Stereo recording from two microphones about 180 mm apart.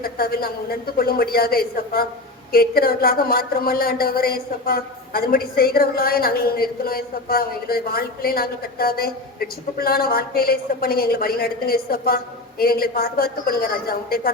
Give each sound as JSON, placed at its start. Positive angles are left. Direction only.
{"t": 0.0, "sound": "speech", "side_deg": 55}